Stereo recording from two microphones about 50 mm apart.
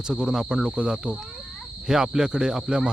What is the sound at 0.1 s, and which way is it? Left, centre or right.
Speech, centre.